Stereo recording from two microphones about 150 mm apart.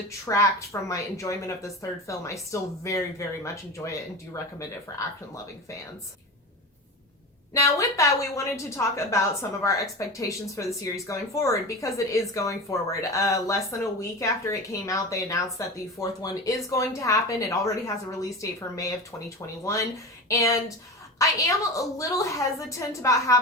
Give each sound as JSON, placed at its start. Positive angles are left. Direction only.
{"t": 0.1, "sound": "a woman's voice", "side_deg": 20}
{"t": 7.5, "sound": "a woman's voice", "side_deg": 20}
{"t": 19.6, "sound": "a woman's voice", "side_deg": 20}